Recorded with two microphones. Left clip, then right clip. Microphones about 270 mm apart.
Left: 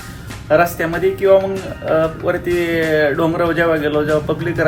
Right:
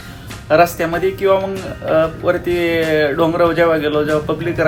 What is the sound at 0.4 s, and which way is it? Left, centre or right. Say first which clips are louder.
Speech: right 1 dB; centre.